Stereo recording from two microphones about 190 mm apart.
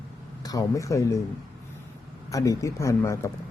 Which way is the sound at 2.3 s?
15° left (ahead or behind).